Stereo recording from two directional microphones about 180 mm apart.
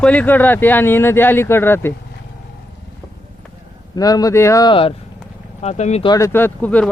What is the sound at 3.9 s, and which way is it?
Speech, 20° left (ahead or behind).